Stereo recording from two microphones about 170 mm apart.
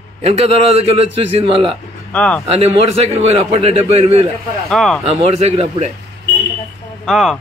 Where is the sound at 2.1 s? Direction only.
5° left (ahead or behind).